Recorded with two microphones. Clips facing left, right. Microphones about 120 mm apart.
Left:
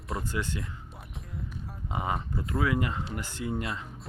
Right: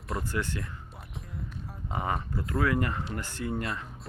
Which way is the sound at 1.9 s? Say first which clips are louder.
Even; 15° left (ahead or behind).